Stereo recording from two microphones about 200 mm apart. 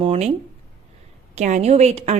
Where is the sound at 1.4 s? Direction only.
35° right (ahead or behind).